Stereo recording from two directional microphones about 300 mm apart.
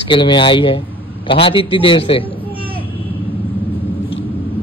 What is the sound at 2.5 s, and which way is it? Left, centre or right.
Vehicle, centre.